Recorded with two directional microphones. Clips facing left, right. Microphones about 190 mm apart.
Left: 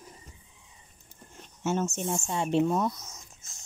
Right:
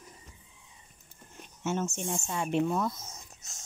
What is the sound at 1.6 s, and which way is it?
Speech, 40° left (ahead or behind).